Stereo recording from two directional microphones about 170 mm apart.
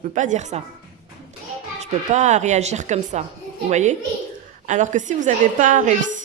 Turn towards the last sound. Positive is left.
turn(degrees=-50)  # may be behind; listen again after turning